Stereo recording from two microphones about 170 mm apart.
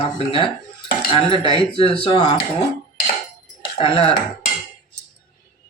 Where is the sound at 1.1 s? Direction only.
30° left (ahead or behind).